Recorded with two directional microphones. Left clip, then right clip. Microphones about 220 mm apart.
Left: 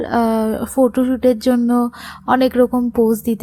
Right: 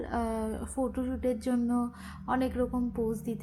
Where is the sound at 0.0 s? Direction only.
40° left (ahead or behind).